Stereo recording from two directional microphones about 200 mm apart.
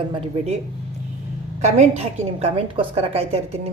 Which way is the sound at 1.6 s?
35° right (ahead or behind).